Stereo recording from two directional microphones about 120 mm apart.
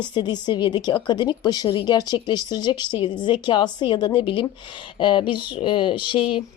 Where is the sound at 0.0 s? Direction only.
40° left (ahead or behind).